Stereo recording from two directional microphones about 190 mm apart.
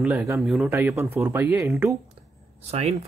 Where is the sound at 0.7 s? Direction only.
15° right (ahead or behind).